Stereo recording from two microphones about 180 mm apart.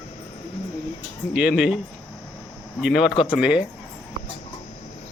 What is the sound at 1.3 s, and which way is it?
Speech, 5° right (ahead or behind).